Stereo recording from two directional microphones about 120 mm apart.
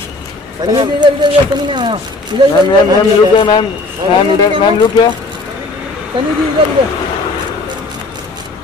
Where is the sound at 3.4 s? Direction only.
40° left (ahead or behind).